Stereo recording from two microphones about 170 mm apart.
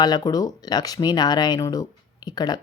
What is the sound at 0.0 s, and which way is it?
Speech, 25° left (ahead or behind).